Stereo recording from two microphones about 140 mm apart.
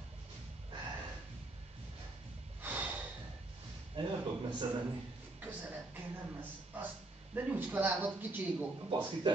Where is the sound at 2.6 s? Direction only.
10° right (ahead or behind).